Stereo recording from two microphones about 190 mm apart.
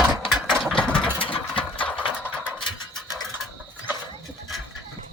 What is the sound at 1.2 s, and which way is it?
Mechanisms, 30° left (ahead or behind).